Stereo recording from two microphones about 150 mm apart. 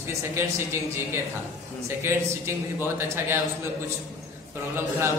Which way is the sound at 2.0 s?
15° right (ahead or behind).